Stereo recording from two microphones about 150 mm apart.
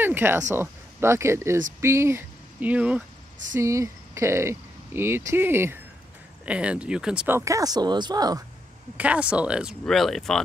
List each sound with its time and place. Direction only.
0.0 s speech: 15° right (ahead or behind)
3.5 s speech: 20° right (ahead or behind)
7.3 s speech: 20° right (ahead or behind)
8.9 s speech: 10° right (ahead or behind)